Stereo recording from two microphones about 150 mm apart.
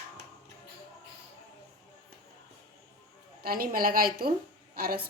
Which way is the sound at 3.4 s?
80° right.